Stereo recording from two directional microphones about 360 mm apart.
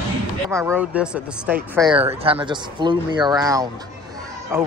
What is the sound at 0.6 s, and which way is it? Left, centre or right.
Speech, centre.